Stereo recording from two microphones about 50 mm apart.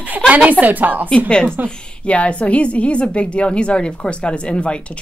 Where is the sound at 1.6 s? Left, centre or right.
Left.